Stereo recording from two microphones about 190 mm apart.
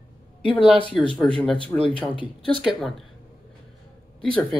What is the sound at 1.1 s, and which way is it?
Speech, 5° left (ahead or behind).